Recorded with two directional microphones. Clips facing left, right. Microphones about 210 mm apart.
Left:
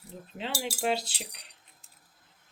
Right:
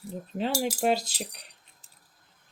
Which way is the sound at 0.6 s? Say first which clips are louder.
Right 2 dB; 45° right (ahead or behind).